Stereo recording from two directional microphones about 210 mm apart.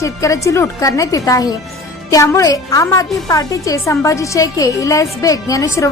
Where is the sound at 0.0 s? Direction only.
15° left (ahead or behind).